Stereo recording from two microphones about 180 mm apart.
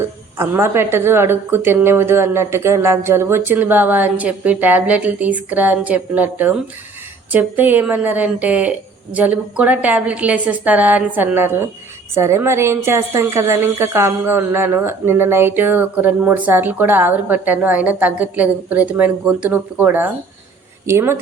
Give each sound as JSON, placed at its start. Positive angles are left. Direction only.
{"t": 0.0, "sound": "a woman's voice", "side_deg": -15}